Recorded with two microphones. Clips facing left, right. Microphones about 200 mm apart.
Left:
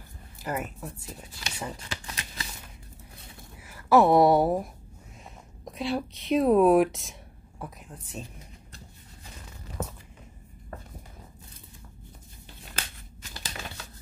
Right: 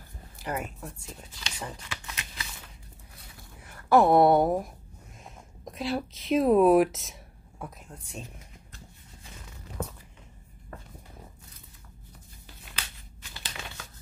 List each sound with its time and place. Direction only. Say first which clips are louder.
0.4 s speech: left 1 dB; centre (ahead or behind)
1.9 s shuffling cards: left 2 dB; 40° left (ahead or behind)
3.6 s a woman's voice: left 1 dB; 5° left (ahead or behind)
5.7 s speech: left 1 dB; centre (ahead or behind)
12.7 s scissors: left 4 dB; 45° left (ahead or behind)